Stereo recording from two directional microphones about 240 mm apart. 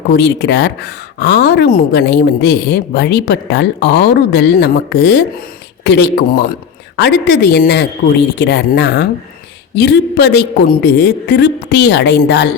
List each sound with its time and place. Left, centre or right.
0.1 s speech: left